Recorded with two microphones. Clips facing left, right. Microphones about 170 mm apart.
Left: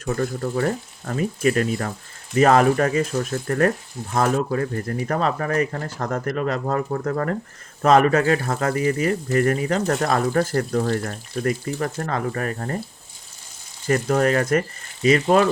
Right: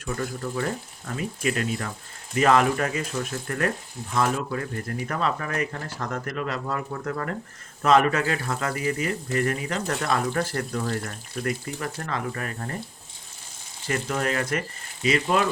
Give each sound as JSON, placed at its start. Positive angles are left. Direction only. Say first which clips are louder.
{"t": 0.0, "sound": "speech", "louder": "left 6 dB", "side_deg": 45}
{"t": 13.8, "sound": "speech", "louder": "left 8 dB", "side_deg": 45}